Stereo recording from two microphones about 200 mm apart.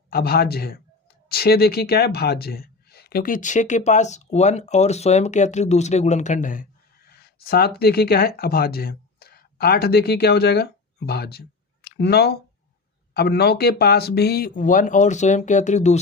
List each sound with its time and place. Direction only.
0.1 s speech: 50° left (ahead or behind)